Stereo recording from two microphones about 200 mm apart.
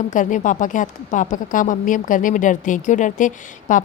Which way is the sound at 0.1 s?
40° left (ahead or behind).